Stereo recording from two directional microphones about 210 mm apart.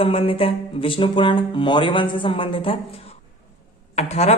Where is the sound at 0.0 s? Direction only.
25° left (ahead or behind).